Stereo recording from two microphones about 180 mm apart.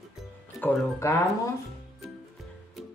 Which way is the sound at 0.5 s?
10° left (ahead or behind).